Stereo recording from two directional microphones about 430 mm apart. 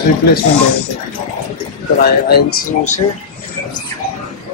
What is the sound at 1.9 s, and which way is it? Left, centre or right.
Speech, left.